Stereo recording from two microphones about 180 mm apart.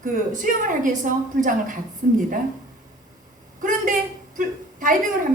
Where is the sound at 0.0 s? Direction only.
50° right (ahead or behind).